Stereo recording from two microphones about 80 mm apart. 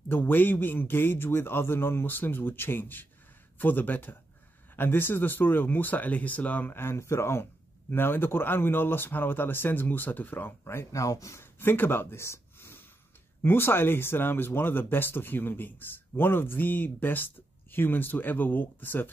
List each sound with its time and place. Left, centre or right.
0.1 s speech: left
11.6 s speech: left